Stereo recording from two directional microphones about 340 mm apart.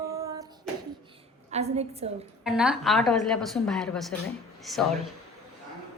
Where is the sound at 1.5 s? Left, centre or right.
Centre.